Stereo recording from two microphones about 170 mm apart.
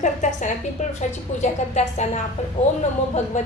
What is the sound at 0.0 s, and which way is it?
A woman's voice, 45° left (ahead or behind).